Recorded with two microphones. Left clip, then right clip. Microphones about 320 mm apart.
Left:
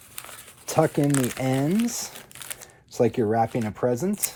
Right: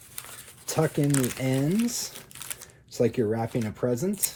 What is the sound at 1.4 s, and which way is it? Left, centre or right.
Speech, left.